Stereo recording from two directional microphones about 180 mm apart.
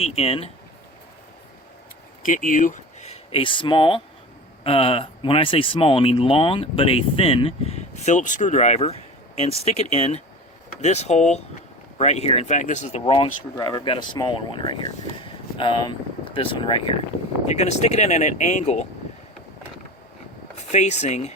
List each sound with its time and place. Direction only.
0.0 s speech: 35° left (ahead or behind)
2.2 s speech: 45° left (ahead or behind)
13.6 s speech: 20° left (ahead or behind)
15.2 s a sound: 25° left (ahead or behind)
17.5 s speech: 40° left (ahead or behind)
20.7 s speech: 40° left (ahead or behind)